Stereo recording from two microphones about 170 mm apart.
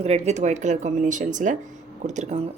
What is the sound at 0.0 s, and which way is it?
Speech, 40° right (ahead or behind).